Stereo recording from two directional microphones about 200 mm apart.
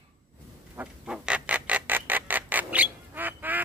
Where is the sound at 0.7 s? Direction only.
5° right (ahead or behind).